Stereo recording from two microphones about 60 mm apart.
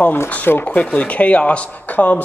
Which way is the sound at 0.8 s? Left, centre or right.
Centre.